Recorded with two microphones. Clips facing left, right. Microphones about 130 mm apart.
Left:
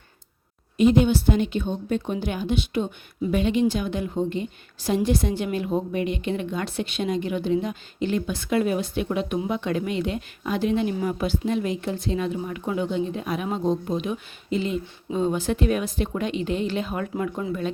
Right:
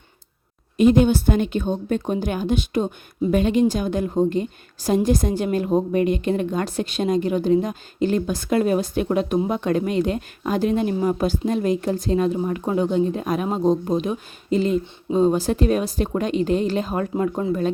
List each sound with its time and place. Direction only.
0.8 s a woman's voice: 50° right (ahead or behind)